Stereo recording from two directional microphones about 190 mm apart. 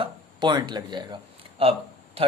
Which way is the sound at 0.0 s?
25° right (ahead or behind).